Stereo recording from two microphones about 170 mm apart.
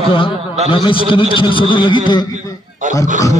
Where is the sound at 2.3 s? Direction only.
45° right (ahead or behind).